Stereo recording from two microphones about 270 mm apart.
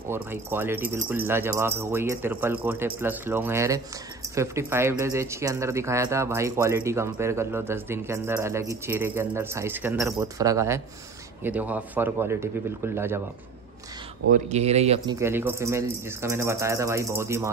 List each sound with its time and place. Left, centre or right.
0.1 s speech: centre
14.3 s speech: right
15.1 s speech: centre